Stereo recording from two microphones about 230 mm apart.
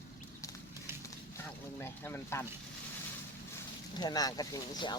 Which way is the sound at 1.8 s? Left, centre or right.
Centre.